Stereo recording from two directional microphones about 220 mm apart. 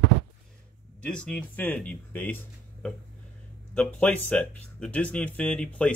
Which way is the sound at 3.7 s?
5° left (ahead or behind).